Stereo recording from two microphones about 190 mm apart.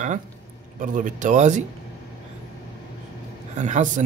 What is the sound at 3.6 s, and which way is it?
Speech, 40° right (ahead or behind).